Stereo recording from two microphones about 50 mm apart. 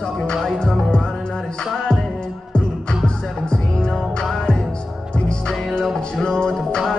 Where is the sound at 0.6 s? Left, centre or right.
Centre.